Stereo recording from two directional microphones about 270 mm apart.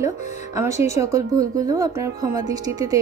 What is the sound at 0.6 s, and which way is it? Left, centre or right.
A woman's voice, centre.